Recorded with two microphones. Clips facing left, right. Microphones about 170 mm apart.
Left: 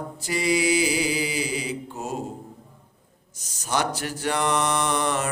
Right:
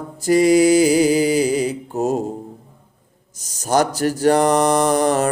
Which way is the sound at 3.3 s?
40° right (ahead or behind).